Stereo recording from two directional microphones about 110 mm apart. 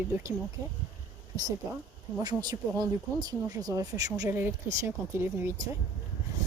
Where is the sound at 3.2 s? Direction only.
35° right (ahead or behind).